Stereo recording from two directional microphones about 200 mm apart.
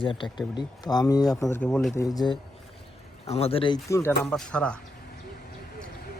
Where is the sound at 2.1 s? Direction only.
25° left (ahead or behind); by 4.8 s 5° left (ahead or behind).